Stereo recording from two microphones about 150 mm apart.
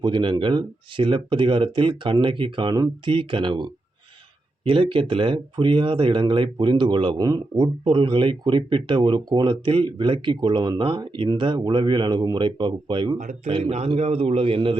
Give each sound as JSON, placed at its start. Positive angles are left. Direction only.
{"t": 0.0, "sound": "speech", "side_deg": -30}
{"t": 13.1, "sound": "speech", "side_deg": -55}
{"t": 13.5, "sound": "speech", "side_deg": -40}